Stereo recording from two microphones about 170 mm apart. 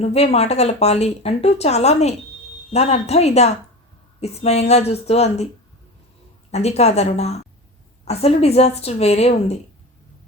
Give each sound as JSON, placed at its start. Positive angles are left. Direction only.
{"t": 0.0, "sound": "speech", "side_deg": 40}
{"t": 6.5, "sound": "speech", "side_deg": 40}